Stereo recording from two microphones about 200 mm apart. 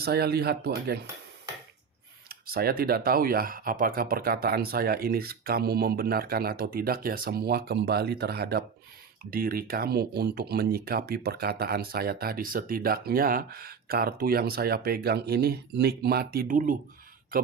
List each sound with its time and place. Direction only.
0.0 s speech: 50° right (ahead or behind)
2.3 s speech: 50° right (ahead or behind)